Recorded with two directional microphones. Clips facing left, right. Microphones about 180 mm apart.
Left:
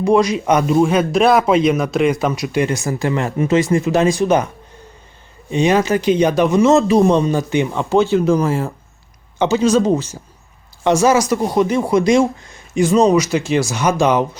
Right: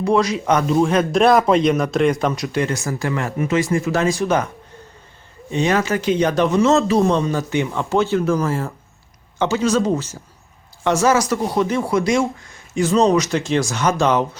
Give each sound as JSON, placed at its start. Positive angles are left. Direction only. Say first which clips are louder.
{"t": 0.0, "sound": "a man's voice", "louder": "left 3 dB", "side_deg": 15}
{"t": 5.5, "sound": "a man's voice", "louder": "left 4 dB", "side_deg": 15}